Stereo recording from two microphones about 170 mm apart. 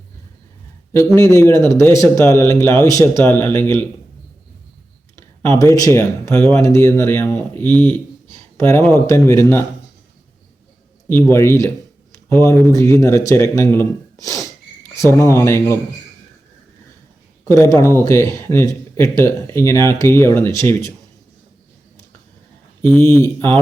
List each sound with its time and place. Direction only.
0.9 s speech: 15° left (ahead or behind)
5.1 s speech: 15° left (ahead or behind)
11.1 s speech: 15° left (ahead or behind)
17.4 s speech: 20° left (ahead or behind)
22.8 s speech: 15° left (ahead or behind)